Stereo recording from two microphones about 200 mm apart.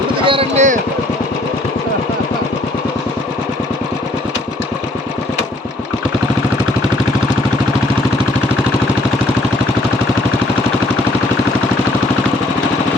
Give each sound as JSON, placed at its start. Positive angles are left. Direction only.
{"t": 0.3, "sound": "speech", "side_deg": -30}